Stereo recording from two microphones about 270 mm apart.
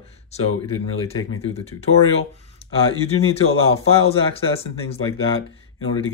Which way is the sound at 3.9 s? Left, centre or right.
Left.